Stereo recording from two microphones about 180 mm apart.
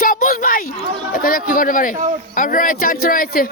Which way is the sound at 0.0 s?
50° left (ahead or behind).